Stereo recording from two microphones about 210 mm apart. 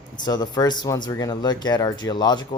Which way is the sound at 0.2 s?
20° left (ahead or behind).